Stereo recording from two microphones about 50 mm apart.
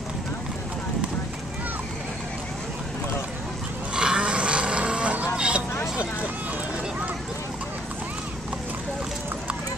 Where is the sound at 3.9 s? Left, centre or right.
Centre.